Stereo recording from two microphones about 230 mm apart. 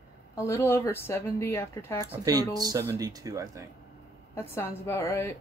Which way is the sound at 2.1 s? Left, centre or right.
Centre.